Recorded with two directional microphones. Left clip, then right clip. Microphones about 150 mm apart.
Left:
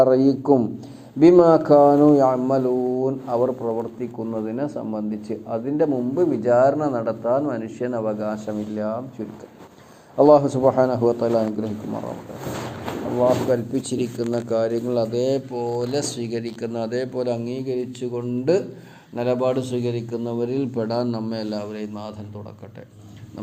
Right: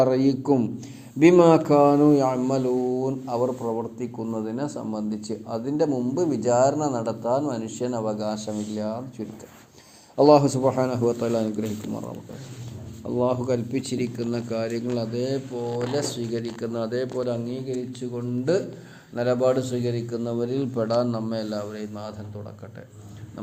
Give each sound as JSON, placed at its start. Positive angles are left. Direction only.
{"t": 0.0, "sound": "speech", "side_deg": -10}
{"t": 10.2, "sound": "speech", "side_deg": -15}
{"t": 13.1, "sound": "a man's voice", "side_deg": 0}
{"t": 15.1, "sound": "a man's voice", "side_deg": 25}
{"t": 19.1, "sound": "a man's voice", "side_deg": 0}